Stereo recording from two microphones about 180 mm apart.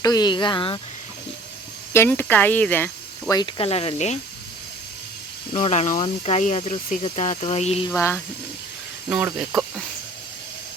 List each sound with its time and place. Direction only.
0.0 s speech: 20° left (ahead or behind)
1.9 s speech: 15° left (ahead or behind); by 4.2 s 40° left (ahead or behind)
5.5 s speech: 40° left (ahead or behind)
7.9 s speech: 15° left (ahead or behind)
9.0 s speech: 10° right (ahead or behind)